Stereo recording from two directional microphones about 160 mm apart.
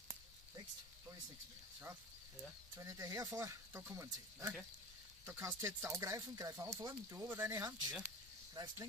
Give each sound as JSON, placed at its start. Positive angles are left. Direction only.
{"t": 2.7, "sound": "speech", "side_deg": -20}
{"t": 8.5, "sound": "speech", "side_deg": -25}